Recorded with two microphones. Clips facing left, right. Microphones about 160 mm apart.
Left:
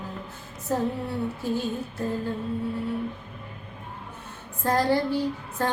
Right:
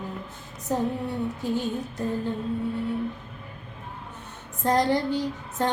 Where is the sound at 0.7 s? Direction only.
15° right (ahead or behind).